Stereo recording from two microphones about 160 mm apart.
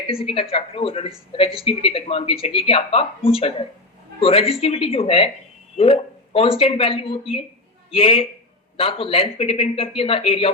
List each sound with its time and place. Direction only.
0.1 s a woman's voice: 35° left (ahead or behind)